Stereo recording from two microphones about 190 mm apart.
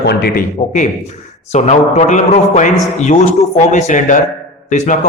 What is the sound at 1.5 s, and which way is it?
A man's voice, 35° left (ahead or behind).